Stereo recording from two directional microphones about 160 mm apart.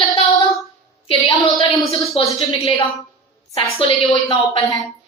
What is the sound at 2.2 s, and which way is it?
A woman's voice, 35° left (ahead or behind).